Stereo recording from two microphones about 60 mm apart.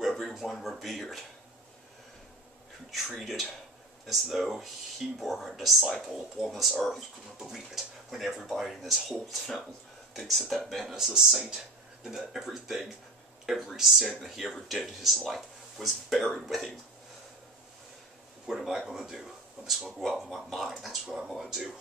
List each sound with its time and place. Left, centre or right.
0.0 s a sound: centre
0.3 s speech: centre
2.9 s speech: centre
18.5 s speech: centre